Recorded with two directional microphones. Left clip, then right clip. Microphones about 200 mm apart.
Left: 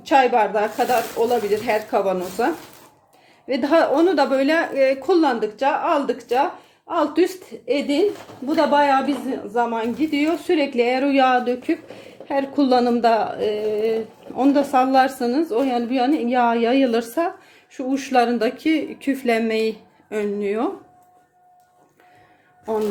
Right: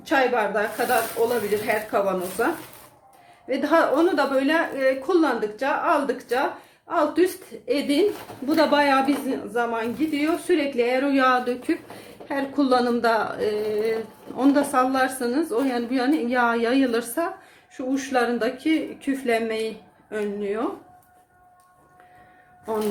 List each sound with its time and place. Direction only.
0.0 s speech: 35° left (ahead or behind)
1.6 s speech: 35° left (ahead or behind)
3.5 s speech: 35° left (ahead or behind)
7.7 s a woman's voice: 20° left (ahead or behind)
9.6 s a woman's voice: 30° left (ahead or behind)